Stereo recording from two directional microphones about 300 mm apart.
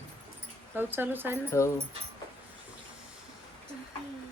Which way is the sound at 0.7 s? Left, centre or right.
Centre.